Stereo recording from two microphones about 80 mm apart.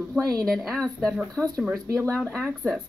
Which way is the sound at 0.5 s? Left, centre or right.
Centre.